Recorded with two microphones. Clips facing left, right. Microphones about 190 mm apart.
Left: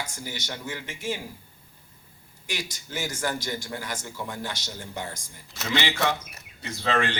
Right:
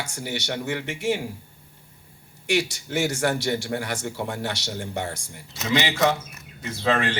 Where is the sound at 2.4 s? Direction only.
70° right (ahead or behind).